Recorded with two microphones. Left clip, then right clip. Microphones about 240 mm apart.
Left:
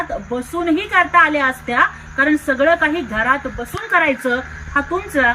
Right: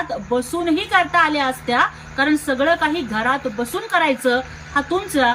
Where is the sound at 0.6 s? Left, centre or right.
Centre.